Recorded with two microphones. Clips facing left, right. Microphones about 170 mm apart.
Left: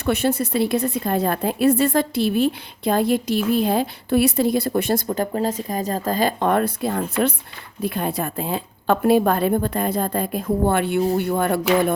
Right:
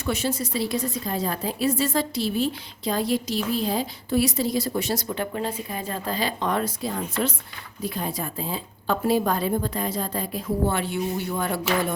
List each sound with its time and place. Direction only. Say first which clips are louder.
0.0 s a woman's voice: left 6 dB; 60° left (ahead or behind)